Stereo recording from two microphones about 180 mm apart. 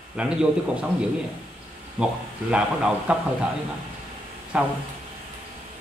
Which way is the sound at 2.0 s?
5° right (ahead or behind).